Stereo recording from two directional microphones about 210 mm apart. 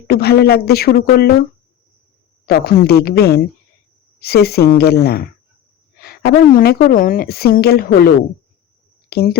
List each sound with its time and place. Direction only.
0.1 s a woman's voice: 50° left (ahead or behind)
2.5 s a woman's voice: 50° left (ahead or behind)